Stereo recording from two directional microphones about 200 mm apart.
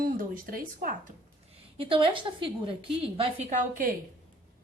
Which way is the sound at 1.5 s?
25° right (ahead or behind).